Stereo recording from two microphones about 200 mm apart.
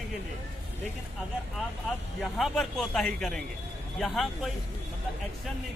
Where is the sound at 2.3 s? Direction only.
Centre (ahead or behind).